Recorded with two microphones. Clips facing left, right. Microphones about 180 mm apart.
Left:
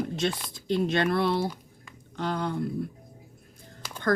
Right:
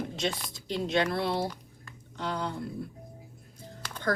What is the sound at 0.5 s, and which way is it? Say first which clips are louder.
Speech: left 2 dB; 55° left (ahead or behind).